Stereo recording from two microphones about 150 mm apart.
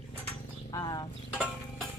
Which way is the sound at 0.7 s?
25° left (ahead or behind).